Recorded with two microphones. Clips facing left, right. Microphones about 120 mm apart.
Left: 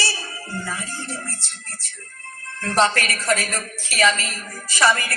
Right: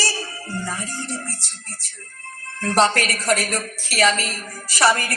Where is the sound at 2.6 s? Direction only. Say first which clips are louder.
Right 1 dB; 35° right (ahead or behind).